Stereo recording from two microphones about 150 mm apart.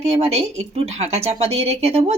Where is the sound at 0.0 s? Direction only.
45° right (ahead or behind).